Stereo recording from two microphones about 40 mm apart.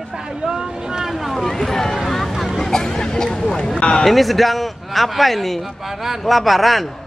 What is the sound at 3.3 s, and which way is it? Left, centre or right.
Speech, centre.